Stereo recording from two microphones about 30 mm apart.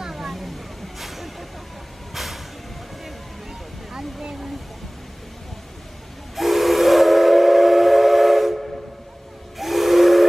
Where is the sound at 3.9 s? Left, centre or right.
Centre.